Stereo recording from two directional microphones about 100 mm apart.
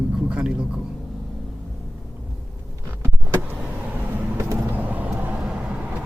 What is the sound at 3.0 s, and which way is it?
Power windows, 20° right (ahead or behind).